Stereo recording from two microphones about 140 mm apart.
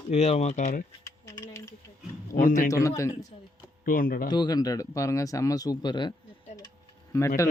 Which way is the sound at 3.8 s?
90° left.